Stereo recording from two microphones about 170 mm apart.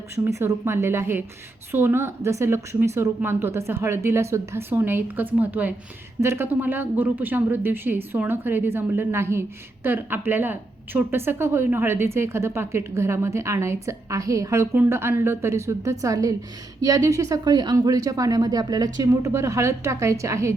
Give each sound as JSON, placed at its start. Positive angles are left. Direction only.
{"t": 0.3, "sound": "speech", "side_deg": -15}